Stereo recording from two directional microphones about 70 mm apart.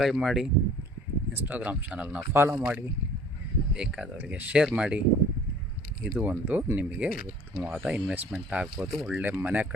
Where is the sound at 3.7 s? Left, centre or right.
Centre.